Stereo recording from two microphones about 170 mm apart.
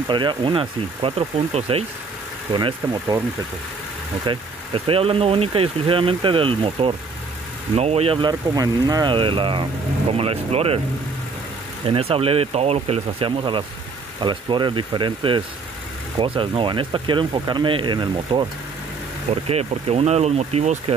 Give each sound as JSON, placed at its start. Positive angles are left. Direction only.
{"t": 0.1, "sound": "speech", "side_deg": -25}
{"t": 4.3, "sound": "speech", "side_deg": -30}
{"t": 11.8, "sound": "speech", "side_deg": -35}
{"t": 19.4, "sound": "speech", "side_deg": -35}